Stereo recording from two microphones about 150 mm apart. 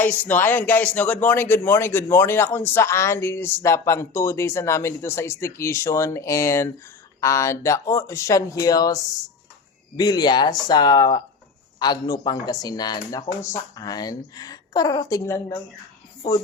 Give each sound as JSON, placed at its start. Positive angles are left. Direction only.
{"t": 0.0, "sound": "a woman's voice", "side_deg": 10}
{"t": 10.0, "sound": "a woman's voice", "side_deg": 25}